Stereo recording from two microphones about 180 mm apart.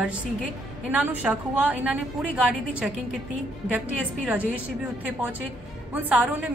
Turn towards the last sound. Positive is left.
turn(degrees=-10)  # may be behind; listen again after turning